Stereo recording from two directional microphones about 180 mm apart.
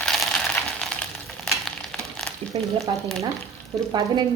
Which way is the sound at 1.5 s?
Centre (ahead or behind).